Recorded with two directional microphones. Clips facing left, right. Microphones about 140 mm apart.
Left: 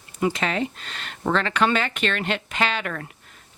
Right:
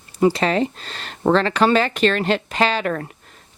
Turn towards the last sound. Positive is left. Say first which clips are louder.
# right 6 dB
turn(degrees=-35)  # may be behind; listen again after turning